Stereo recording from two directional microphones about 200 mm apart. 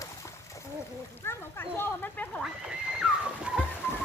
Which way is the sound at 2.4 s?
5° right (ahead or behind).